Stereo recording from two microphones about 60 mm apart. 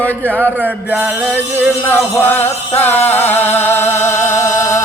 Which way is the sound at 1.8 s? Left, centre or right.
Left.